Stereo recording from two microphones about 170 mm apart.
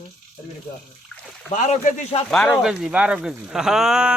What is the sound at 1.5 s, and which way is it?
Speech, 45° left (ahead or behind).